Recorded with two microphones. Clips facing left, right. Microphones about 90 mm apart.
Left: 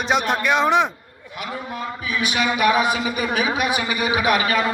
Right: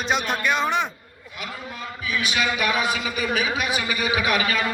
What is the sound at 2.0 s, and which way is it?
A man's voice, 35° left (ahead or behind).